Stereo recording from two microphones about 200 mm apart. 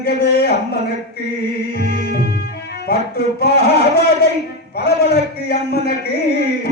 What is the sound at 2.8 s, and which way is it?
A man's voice, 55° left (ahead or behind).